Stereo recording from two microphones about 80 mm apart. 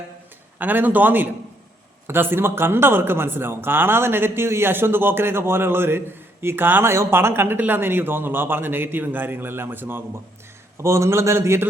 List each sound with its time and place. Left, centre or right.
0.6 s a man's voice: right